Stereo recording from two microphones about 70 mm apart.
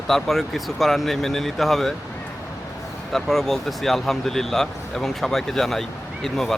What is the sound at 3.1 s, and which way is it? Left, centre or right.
Speech, centre.